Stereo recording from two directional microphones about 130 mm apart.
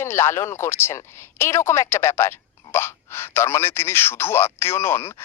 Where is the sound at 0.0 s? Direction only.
20° left (ahead or behind).